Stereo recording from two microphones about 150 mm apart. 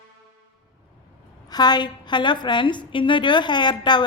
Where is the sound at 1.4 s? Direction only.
25° left (ahead or behind).